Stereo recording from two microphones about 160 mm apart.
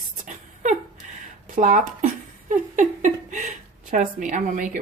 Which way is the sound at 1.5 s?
55° right (ahead or behind).